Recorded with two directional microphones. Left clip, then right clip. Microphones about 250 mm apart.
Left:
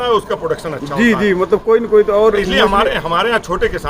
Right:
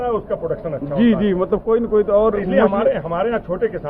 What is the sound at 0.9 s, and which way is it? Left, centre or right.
A man's voice, centre.